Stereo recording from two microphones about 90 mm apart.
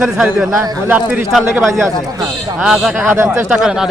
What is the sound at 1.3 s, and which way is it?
A man's voice, centre (ahead or behind).